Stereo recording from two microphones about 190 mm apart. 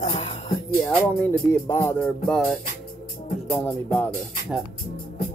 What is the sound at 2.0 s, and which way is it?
Speech, centre (ahead or behind).